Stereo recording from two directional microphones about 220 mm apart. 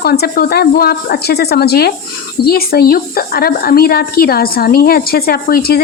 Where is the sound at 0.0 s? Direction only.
45° left (ahead or behind).